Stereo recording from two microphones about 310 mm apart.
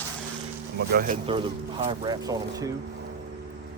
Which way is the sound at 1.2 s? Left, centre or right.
Centre.